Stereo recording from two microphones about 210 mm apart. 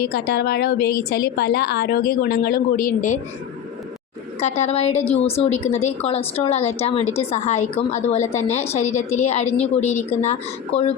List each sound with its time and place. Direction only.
0.0 s a woman's voice: 45° left (ahead or behind)
4.4 s a woman's voice: 30° left (ahead or behind)